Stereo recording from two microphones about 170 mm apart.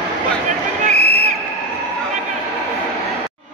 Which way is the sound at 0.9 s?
70° left (ahead or behind).